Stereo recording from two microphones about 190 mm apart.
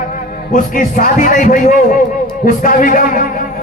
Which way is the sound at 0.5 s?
45° left (ahead or behind).